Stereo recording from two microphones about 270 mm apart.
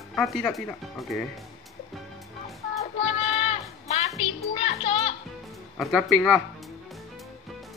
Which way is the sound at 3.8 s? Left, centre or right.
Left.